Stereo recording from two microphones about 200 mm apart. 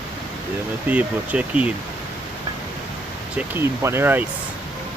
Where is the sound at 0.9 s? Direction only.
5° right (ahead or behind).